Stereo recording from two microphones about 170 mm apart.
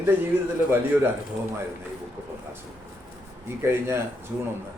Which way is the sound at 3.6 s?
15° right (ahead or behind).